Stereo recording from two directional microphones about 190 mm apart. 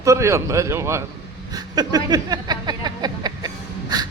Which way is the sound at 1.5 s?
20° right (ahead or behind).